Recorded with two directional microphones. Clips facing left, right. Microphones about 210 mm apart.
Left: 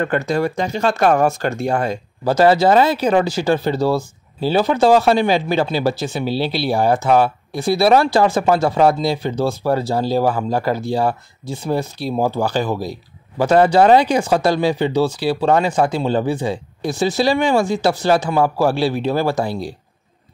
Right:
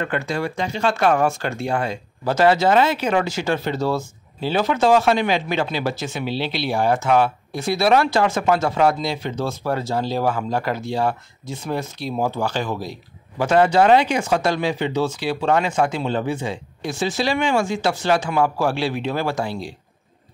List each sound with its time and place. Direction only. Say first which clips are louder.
0.0 s speech: left 5 dB; 40° left (ahead or behind)